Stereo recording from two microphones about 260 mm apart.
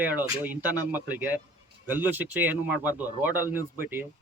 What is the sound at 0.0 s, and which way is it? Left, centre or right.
Speech, centre.